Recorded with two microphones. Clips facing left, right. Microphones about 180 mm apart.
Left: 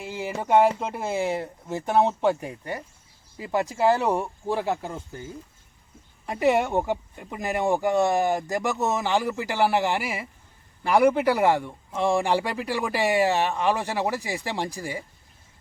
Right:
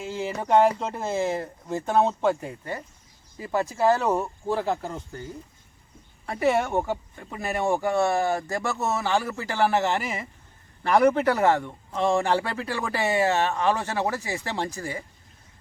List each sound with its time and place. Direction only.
0.0 s speech: 15° left (ahead or behind)
6.2 s speech: 15° left (ahead or behind)